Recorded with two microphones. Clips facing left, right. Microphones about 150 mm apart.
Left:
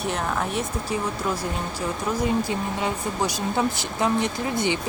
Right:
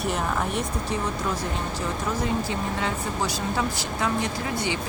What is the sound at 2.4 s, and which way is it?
A woman's voice, 15° left (ahead or behind).